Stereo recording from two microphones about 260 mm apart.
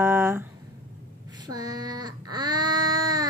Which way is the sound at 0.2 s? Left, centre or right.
Centre.